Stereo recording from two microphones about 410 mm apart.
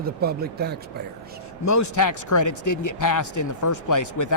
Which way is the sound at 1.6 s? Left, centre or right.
Left.